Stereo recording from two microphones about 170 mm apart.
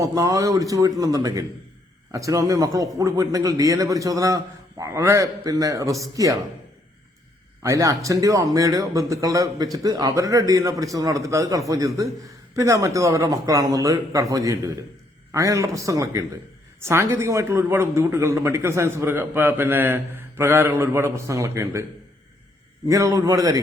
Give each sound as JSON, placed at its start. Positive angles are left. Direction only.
{"t": 0.0, "sound": "a man's voice", "side_deg": -20}
{"t": 7.6, "sound": "a man's voice", "side_deg": -20}
{"t": 22.9, "sound": "a man's voice", "side_deg": -20}